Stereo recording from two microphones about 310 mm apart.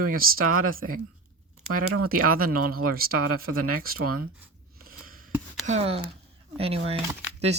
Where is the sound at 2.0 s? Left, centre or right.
Right.